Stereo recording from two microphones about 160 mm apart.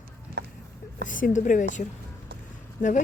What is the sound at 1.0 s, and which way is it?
Speech, 55° left (ahead or behind).